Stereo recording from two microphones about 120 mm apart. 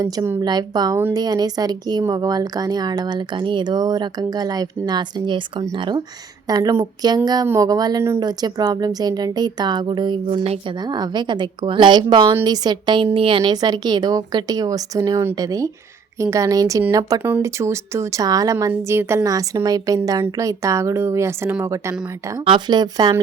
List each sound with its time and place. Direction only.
0.4 s speech: 35° right (ahead or behind)
6.5 s speech: 30° right (ahead or behind)
22.4 s speech: 40° right (ahead or behind)